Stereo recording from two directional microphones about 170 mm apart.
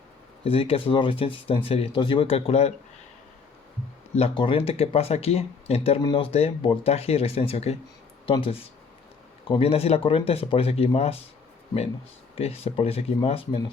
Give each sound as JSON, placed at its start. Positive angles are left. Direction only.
{"t": 0.4, "sound": "speech", "side_deg": 35}
{"t": 4.1, "sound": "speech", "side_deg": 35}
{"t": 12.4, "sound": "speech", "side_deg": 35}